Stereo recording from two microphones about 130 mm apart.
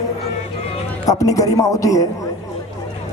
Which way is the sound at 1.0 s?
25° left (ahead or behind).